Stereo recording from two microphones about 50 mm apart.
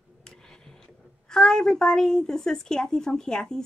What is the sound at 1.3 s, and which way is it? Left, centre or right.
A woman's voice, centre.